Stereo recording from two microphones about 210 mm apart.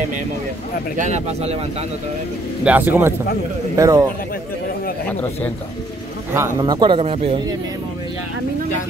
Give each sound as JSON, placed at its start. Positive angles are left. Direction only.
{"t": 0.9, "sound": "speech", "side_deg": -35}
{"t": 2.6, "sound": "speech", "side_deg": -10}
{"t": 6.3, "sound": "a man's voice", "side_deg": -15}